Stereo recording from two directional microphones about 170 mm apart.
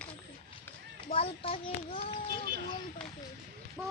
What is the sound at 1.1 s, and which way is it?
Child singing, 35° left (ahead or behind).